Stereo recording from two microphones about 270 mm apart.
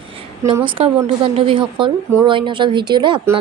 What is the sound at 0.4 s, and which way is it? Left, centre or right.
A woman's voice, centre.